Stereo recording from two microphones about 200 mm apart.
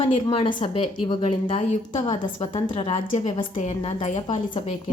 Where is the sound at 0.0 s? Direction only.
25° left (ahead or behind).